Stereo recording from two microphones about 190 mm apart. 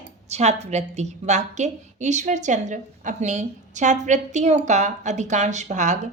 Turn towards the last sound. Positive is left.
turn(degrees=-40)  # may be behind; listen again after turning